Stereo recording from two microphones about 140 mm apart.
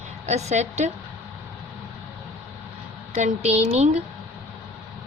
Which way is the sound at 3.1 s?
60° right (ahead or behind).